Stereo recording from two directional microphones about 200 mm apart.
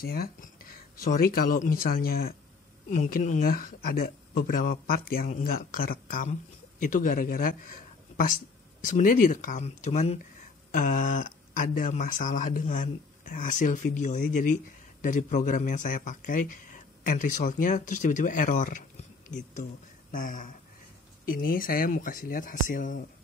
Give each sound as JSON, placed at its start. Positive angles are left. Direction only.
{"t": 0.0, "sound": "a man's voice", "side_deg": 50}